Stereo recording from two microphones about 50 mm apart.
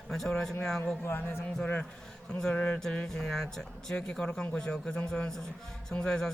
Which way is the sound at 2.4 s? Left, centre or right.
Centre.